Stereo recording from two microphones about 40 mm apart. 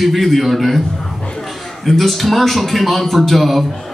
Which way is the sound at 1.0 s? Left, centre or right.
Centre.